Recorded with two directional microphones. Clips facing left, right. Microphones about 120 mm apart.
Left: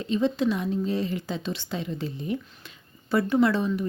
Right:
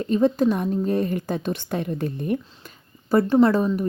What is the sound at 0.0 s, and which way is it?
Speech, 50° right (ahead or behind).